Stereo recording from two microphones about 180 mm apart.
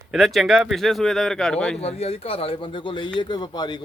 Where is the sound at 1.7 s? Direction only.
35° left (ahead or behind).